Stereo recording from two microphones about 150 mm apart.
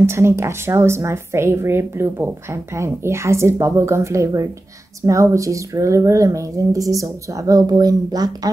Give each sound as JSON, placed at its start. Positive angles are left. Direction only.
{"t": 0.0, "sound": "speech", "side_deg": -15}